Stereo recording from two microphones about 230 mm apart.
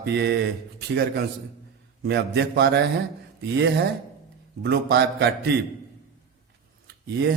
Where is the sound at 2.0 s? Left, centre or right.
Right.